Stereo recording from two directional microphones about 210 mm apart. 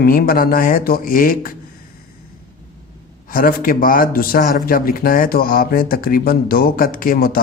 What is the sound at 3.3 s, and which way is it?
Speech, 40° left (ahead or behind).